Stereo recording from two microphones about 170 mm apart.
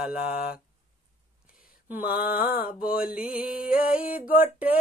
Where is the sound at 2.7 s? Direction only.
60° left (ahead or behind).